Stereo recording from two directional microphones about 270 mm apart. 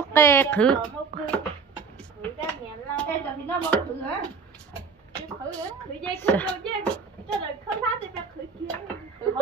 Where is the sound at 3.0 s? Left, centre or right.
Centre.